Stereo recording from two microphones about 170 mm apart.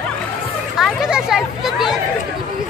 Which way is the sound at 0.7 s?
5° right (ahead or behind).